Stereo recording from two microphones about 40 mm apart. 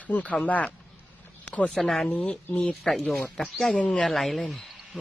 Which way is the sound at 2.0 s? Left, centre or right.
Left.